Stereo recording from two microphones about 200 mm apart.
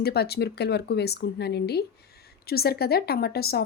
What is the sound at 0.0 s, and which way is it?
A woman's voice, 50° left (ahead or behind).